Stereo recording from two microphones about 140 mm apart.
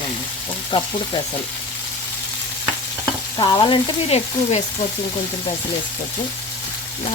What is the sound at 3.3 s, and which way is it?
Frying, 30° left (ahead or behind).